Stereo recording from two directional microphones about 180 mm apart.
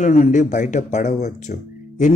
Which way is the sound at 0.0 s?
45° left (ahead or behind).